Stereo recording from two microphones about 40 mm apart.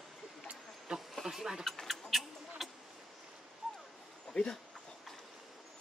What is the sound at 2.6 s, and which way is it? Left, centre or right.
Vehicle, centre.